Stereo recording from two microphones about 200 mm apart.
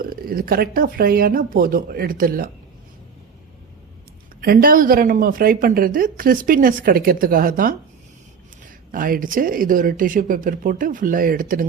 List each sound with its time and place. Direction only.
0.0 s speech: 45° right (ahead or behind)
4.4 s speech: 45° right (ahead or behind)
8.9 s speech: 45° right (ahead or behind)